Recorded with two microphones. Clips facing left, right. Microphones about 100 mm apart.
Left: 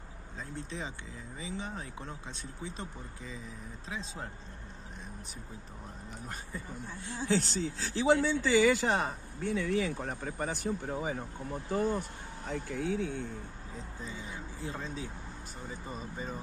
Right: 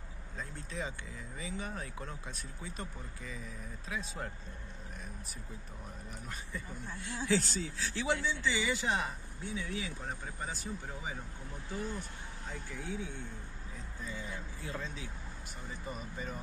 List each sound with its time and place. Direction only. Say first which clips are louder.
0.4 s speech: left 1 dB; 25° left (ahead or behind)
6.2 s speech: left 2 dB; 40° left (ahead or behind)
8.2 s a man's voice: left 8 dB; 50° left (ahead or behind)
9.5 s speech: left 9 dB; 65° left (ahead or behind)
12.4 s speech: left 9 dB; 70° left (ahead or behind)
14.0 s speech: right 2 dB; 25° left (ahead or behind)